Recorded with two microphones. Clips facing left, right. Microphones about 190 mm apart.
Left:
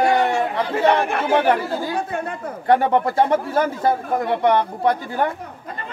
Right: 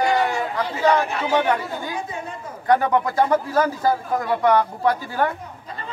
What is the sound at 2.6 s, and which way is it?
Speech, 30° left (ahead or behind).